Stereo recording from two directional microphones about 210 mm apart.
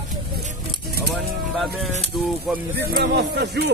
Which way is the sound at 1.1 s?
Centre (ahead or behind).